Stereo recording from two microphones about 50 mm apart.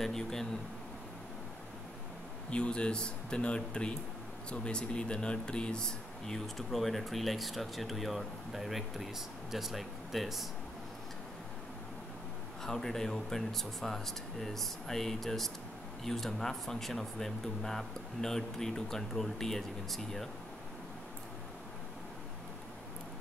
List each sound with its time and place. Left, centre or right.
0.0 s speech: centre
2.5 s speech: left; by 10.4 s centre
12.6 s speech: centre